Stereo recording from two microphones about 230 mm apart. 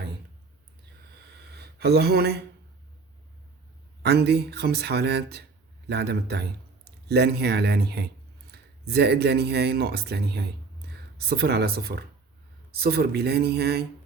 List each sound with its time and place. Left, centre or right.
1.5 s speech: right
4.0 s speech: right
8.5 s a sound: right
8.9 s speech: right